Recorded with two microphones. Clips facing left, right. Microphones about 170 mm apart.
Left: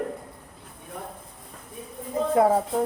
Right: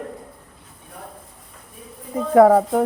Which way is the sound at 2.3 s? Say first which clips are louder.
Right 9 dB; 70° right (ahead or behind).